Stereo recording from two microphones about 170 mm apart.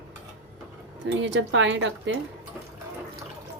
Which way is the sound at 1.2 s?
90° right.